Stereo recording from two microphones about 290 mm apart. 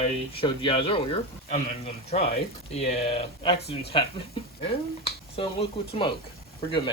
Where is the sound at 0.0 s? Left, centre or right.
Centre.